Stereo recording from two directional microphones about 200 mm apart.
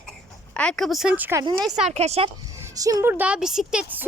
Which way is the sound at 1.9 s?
30° right (ahead or behind).